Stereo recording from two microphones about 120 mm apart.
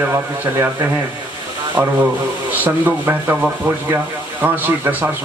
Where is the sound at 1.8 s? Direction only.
20° right (ahead or behind).